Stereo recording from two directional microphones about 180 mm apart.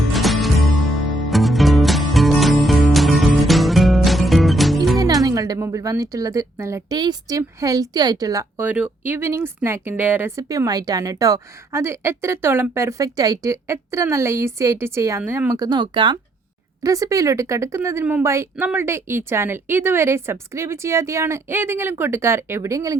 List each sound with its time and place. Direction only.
0.1 s music: centre (ahead or behind)
4.9 s speech: 20° right (ahead or behind)